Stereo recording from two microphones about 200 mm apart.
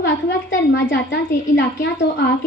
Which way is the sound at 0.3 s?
65° left (ahead or behind).